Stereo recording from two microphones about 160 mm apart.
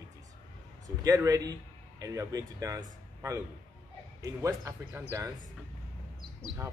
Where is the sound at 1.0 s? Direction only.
20° right (ahead or behind).